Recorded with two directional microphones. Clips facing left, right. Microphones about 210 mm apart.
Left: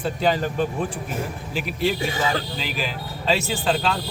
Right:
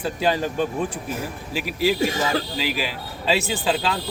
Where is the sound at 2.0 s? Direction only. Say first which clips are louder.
Right 2 dB; 40° right (ahead or behind).